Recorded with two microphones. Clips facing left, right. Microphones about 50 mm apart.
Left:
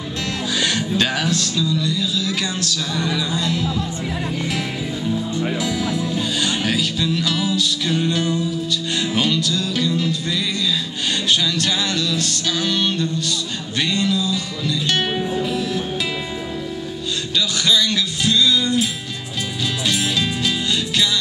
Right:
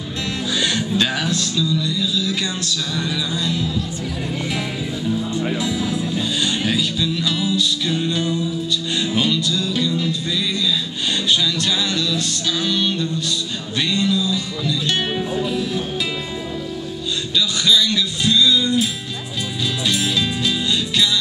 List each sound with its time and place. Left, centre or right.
0.6 s music: left
3.3 s music: left
5.6 s music: left
9.0 s music: left
11.5 s music: left
17.6 s music: left
19.9 s music: left